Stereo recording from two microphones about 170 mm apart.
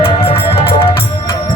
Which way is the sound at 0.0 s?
35° left (ahead or behind).